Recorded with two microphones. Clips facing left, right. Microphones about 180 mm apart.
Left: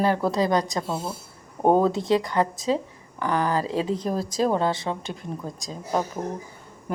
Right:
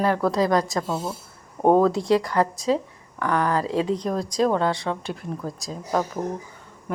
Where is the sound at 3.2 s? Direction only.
30° left (ahead or behind).